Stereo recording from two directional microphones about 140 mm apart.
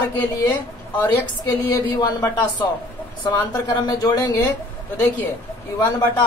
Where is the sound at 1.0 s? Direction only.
20° left (ahead or behind).